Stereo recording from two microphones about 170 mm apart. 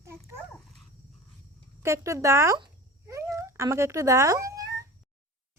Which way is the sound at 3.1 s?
20° right (ahead or behind).